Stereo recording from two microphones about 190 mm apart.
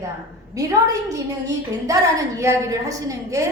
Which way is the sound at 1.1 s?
15° right (ahead or behind).